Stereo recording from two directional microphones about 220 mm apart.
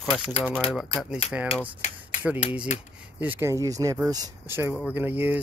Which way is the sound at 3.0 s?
5° right (ahead or behind).